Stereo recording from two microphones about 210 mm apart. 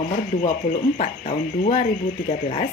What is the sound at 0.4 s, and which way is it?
Speech, 35° left (ahead or behind).